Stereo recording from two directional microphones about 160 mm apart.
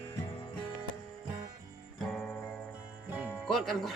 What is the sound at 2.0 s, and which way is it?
Music, 5° left (ahead or behind).